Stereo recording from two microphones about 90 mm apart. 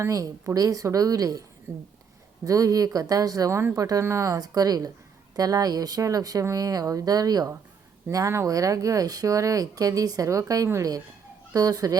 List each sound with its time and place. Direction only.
0.0 s speech: 35° right (ahead or behind)
8.1 s speech: 35° right (ahead or behind)